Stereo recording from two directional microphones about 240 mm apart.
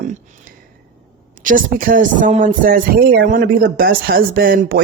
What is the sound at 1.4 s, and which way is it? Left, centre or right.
Speech, right.